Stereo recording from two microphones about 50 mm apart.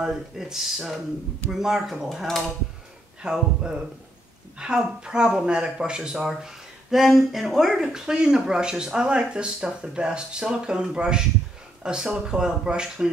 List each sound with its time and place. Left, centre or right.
0.0 s speech: centre
2.0 s speech: centre
3.2 s speech: centre